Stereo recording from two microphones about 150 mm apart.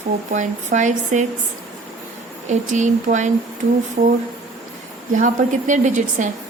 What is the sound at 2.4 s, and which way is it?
Speech, 55° right (ahead or behind).